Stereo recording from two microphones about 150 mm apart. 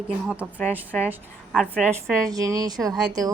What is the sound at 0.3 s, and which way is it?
Speech, 10° right (ahead or behind).